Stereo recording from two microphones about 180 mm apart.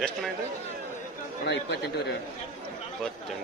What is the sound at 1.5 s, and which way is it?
Speech, 65° left (ahead or behind).